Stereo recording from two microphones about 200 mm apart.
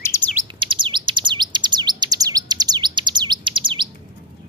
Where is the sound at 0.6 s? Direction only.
25° right (ahead or behind).